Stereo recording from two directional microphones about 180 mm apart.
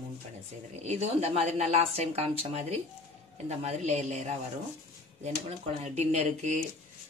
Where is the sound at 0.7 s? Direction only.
35° right (ahead or behind).